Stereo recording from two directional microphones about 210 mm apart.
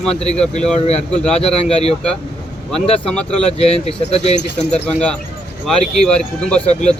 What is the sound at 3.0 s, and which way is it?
Speech, 5° left (ahead or behind).